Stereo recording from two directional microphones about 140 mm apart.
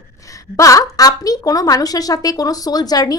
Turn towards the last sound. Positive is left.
turn(degrees=25)  # may be behind; listen again after turning